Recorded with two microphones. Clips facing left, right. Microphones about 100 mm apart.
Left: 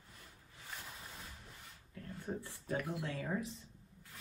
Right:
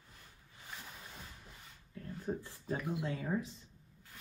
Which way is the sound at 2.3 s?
5° right (ahead or behind).